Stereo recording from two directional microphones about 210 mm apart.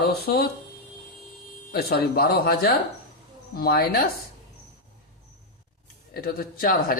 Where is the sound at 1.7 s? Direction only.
45° left (ahead or behind).